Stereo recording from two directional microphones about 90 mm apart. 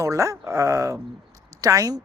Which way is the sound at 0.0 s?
35° right (ahead or behind).